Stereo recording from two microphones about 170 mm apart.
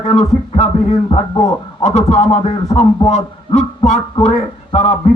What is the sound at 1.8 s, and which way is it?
A man's voice, 40° left (ahead or behind).